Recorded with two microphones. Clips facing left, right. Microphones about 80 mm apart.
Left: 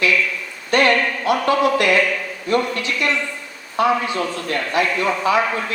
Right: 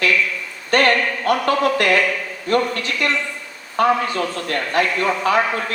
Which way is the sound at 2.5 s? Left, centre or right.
Right.